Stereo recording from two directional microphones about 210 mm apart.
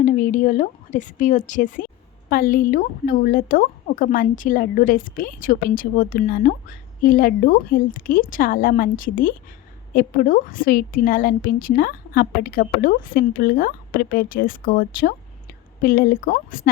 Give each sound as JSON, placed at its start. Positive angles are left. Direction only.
{"t": 0.0, "sound": "a woman's voice", "side_deg": 35}